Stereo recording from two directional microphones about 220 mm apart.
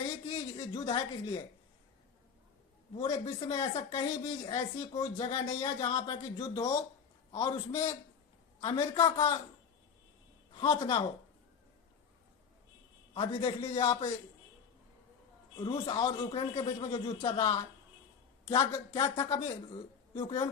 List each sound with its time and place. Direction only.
0.3 s a sound: 20° left (ahead or behind)
2.9 s speech: 20° left (ahead or behind)
10.5 s speech: 20° left (ahead or behind)
13.1 s speech: 20° left (ahead or behind)
15.5 s speech: 15° left (ahead or behind)